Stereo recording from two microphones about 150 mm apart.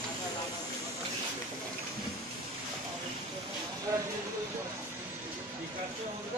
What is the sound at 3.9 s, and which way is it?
Vehicle, 20° right (ahead or behind).